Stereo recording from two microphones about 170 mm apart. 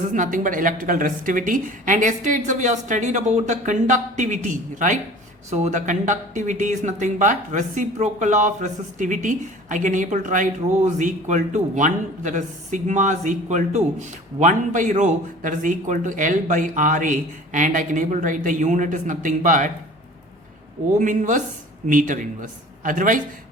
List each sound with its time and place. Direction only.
0.1 s speech: 50° right (ahead or behind)
21.0 s speech: 50° right (ahead or behind)